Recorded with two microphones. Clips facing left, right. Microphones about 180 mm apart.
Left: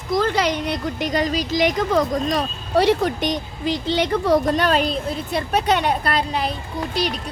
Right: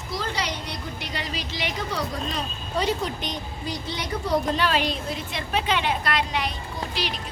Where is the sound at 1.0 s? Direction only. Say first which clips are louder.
Left 13 dB; 45° left (ahead or behind).